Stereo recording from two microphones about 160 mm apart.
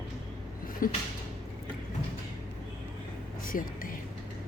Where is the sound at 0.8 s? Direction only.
60° left (ahead or behind).